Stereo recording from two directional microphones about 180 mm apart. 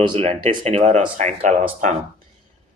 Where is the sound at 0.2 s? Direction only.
35° right (ahead or behind).